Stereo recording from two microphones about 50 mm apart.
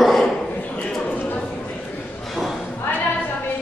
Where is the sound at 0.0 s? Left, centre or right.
Centre.